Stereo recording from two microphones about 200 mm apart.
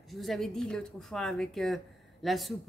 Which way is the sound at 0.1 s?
Centre (ahead or behind).